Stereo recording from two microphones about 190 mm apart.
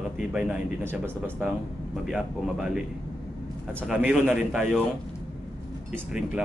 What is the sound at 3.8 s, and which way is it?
Speech, 5° right (ahead or behind).